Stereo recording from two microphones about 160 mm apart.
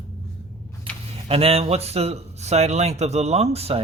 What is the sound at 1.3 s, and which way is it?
Speech, 40° right (ahead or behind).